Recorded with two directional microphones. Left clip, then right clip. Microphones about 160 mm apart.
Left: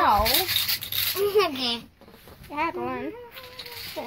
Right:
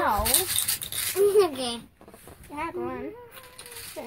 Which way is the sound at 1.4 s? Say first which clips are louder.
Even; 60° right (ahead or behind).